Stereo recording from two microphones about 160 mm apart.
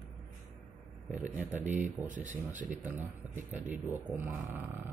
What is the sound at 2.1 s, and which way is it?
Speech, 55° right (ahead or behind).